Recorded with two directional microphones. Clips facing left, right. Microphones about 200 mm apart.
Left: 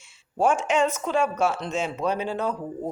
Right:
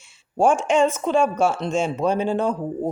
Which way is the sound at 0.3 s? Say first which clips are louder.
Right 4 dB; 30° right (ahead or behind).